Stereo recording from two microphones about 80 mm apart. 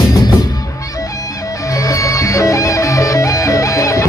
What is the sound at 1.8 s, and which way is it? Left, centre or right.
Music, left.